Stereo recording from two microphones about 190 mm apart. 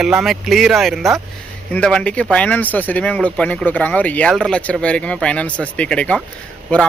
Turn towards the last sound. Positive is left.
turn(degrees=5)  # may be behind; listen again after turning